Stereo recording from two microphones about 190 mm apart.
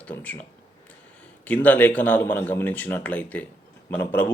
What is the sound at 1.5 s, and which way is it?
A man's voice, 10° left (ahead or behind).